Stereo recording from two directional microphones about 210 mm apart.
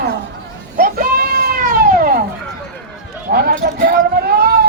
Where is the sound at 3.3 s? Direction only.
45° right (ahead or behind).